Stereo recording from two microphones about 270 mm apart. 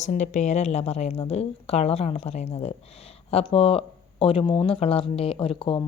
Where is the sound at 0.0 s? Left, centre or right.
Left.